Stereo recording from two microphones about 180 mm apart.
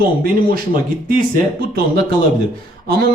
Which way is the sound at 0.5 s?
50° right (ahead or behind).